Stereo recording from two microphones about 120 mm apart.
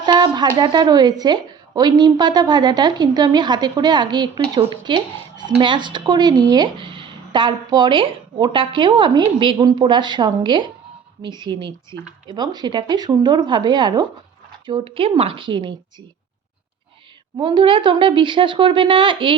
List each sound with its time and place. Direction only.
0.0 s speech: 35° right (ahead or behind)
14.7 s a woman's voice: 50° right (ahead or behind)
17.3 s a woman's voice: 40° right (ahead or behind)